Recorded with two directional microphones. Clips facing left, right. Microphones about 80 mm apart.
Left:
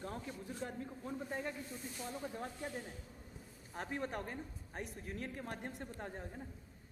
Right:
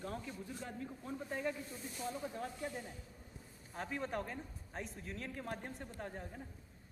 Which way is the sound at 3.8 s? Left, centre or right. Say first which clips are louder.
Even; left.